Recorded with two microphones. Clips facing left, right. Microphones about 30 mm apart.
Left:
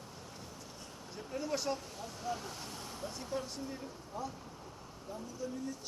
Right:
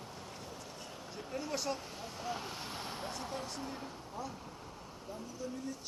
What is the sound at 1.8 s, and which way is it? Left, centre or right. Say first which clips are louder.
Speech: even; centre.